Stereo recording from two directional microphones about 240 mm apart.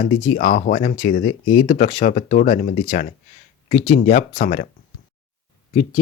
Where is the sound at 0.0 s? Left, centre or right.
Left.